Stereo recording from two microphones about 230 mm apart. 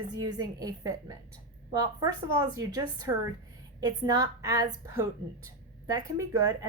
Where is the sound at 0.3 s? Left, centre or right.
Centre.